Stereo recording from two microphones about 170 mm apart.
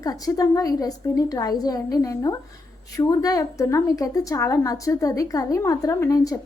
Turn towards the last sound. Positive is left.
turn(degrees=20)  # may be behind; listen again after turning